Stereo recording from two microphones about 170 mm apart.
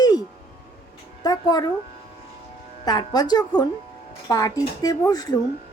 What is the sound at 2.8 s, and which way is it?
A woman's voice, 25° left (ahead or behind).